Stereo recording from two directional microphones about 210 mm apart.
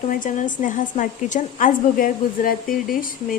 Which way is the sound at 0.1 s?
40° left (ahead or behind).